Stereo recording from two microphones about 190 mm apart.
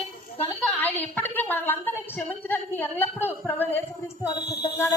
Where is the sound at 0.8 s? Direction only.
10° left (ahead or behind).